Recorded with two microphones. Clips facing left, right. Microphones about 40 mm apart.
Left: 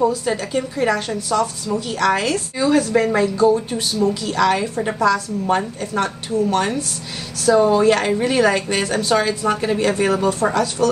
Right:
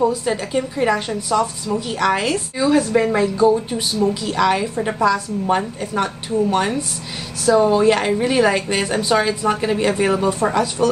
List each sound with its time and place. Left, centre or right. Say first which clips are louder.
0.1 s a woman's voice: even; centre